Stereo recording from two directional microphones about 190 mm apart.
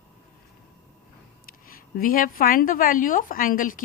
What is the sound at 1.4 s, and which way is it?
A woman's voice, 50° left (ahead or behind).